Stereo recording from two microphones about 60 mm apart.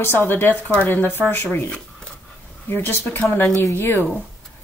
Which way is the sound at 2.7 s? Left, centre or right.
Left.